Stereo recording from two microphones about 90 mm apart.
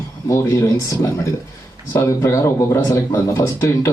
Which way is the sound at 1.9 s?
30° left (ahead or behind).